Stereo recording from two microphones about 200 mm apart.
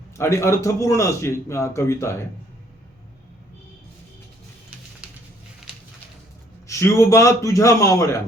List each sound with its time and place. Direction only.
0.2 s a man's voice: 15° left (ahead or behind)
5.0 s a sound: 5° right (ahead or behind)
6.7 s a man's voice: 15° left (ahead or behind)